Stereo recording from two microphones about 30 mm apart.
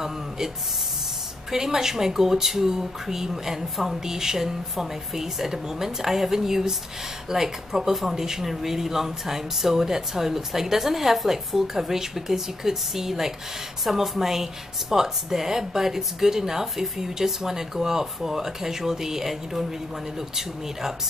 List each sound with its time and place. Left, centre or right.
1.5 s speech: centre